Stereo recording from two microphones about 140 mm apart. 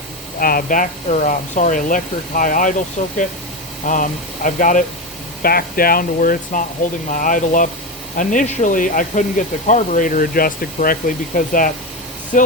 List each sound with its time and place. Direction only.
0.3 s speech: 90° left; by 2.7 s 75° left (ahead or behind)
3.0 s speech: 60° left (ahead or behind)
5.4 s speech: 90° left; by 9.2 s 70° left (ahead or behind)
9.6 s speech: 60° left (ahead or behind); by 10.9 s 90° left
11.3 s speech: 75° left (ahead or behind)
12.3 s speech: 65° left (ahead or behind)